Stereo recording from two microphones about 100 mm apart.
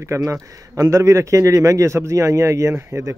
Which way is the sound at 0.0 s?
30° right (ahead or behind).